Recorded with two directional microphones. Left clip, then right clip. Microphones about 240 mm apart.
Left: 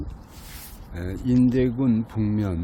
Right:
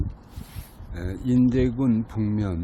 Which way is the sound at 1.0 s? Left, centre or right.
Centre.